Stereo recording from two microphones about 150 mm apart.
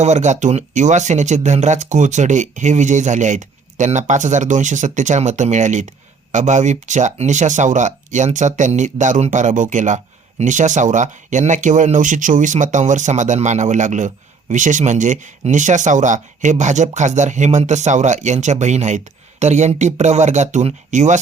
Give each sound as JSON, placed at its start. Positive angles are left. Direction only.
{"t": 0.0, "sound": "speech", "side_deg": -50}